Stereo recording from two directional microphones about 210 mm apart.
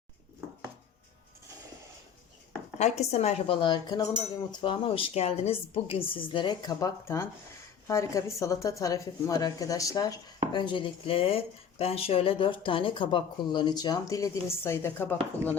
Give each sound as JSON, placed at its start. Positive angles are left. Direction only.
{"t": 2.7, "sound": "a woman's voice", "side_deg": 30}